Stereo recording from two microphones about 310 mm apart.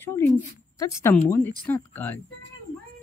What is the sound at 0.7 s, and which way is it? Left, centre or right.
Speech, centre.